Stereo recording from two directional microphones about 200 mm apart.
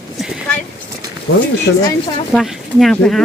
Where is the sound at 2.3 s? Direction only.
Centre (ahead or behind).